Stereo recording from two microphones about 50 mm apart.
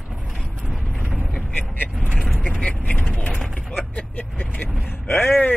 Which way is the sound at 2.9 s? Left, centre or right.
Left.